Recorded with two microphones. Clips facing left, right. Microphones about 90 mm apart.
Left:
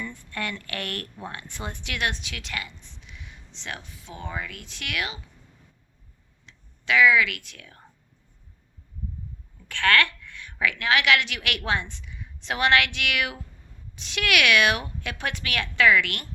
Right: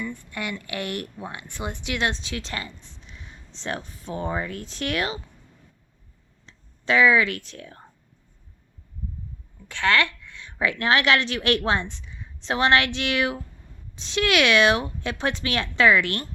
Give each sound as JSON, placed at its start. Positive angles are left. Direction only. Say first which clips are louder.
{"t": 0.3, "sound": "speech", "louder": "right 1 dB", "side_deg": -15}
{"t": 6.4, "sound": "speech", "louder": "right 4 dB", "side_deg": -35}
{"t": 9.6, "sound": "a woman's voice", "louder": "even", "side_deg": -20}